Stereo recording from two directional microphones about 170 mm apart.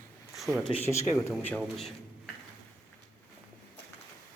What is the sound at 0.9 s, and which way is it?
Speech, 15° left (ahead or behind).